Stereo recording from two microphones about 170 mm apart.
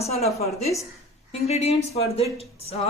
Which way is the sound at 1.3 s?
35° left (ahead or behind).